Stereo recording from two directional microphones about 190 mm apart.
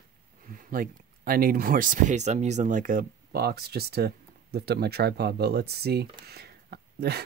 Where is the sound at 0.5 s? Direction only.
50° right (ahead or behind).